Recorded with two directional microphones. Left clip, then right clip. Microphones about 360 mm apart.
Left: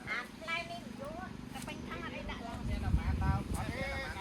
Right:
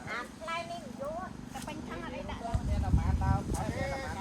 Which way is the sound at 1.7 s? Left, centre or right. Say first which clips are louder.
Right 2 dB; right.